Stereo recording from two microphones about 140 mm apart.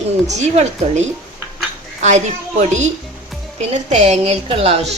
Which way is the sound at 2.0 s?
55° right (ahead or behind).